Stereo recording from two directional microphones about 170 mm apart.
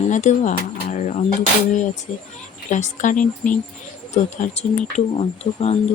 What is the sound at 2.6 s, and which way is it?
Speech, 45° left (ahead or behind).